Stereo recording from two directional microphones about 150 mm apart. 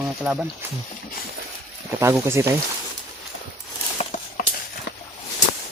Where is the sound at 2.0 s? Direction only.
20° right (ahead or behind).